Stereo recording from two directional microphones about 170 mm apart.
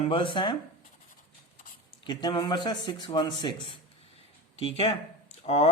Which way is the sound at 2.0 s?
25° left (ahead or behind).